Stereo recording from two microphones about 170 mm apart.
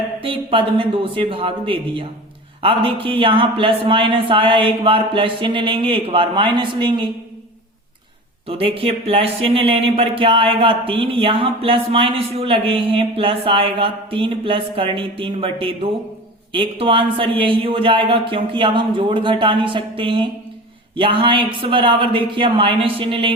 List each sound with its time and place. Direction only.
0.2 s speech: 30° right (ahead or behind)
8.4 s speech: 35° right (ahead or behind)